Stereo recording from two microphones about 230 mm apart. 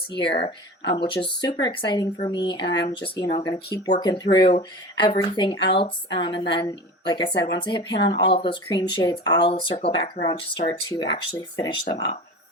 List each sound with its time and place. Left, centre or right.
0.1 s speech: left
0.3 s speech: left